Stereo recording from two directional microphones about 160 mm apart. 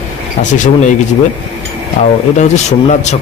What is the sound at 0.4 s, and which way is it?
Speech, 50° left (ahead or behind).